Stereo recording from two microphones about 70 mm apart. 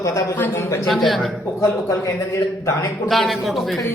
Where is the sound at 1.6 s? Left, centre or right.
Left.